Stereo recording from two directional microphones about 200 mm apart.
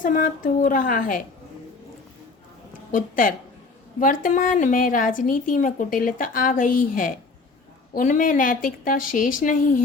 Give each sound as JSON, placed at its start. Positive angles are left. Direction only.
{"t": 0.0, "sound": "a woman's voice", "side_deg": 40}
{"t": 2.9, "sound": "a woman's voice", "side_deg": 45}